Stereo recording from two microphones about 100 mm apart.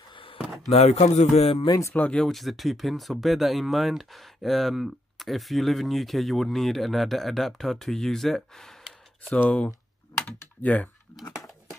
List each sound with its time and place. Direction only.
0.1 s a sound: 60° left (ahead or behind)
0.7 s speech: 90° left
1.7 s speech: 30° left (ahead or behind)
2.0 s speech: 10° left (ahead or behind)
9.3 s speech: 15° left (ahead or behind)